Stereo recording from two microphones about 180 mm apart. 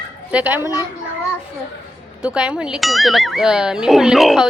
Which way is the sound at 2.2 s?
5° right (ahead or behind).